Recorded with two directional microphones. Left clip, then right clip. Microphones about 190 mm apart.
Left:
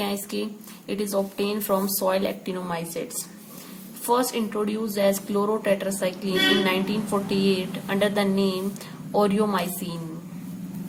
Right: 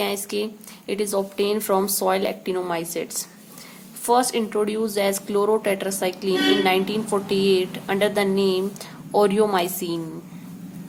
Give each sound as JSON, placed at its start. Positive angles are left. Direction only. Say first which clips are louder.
{"t": 0.0, "sound": "speech", "louder": "right 4 dB", "side_deg": -35}
{"t": 4.0, "sound": "speech", "louder": "right 4 dB", "side_deg": -35}